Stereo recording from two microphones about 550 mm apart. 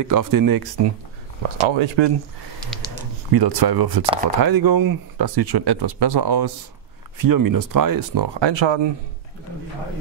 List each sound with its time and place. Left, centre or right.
0.0 s speech: right
1.6 s speech: right
3.3 s speech: right